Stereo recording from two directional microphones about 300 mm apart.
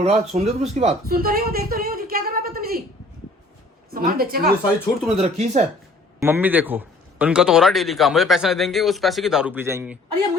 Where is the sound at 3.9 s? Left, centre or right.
Right.